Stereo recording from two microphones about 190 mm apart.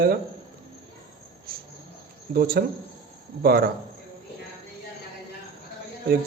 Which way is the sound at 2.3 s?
55° right (ahead or behind).